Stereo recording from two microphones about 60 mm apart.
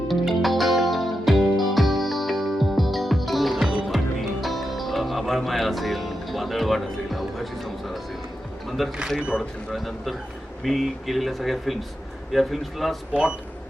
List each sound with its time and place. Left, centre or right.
0.1 s music: centre
8.8 s speech: centre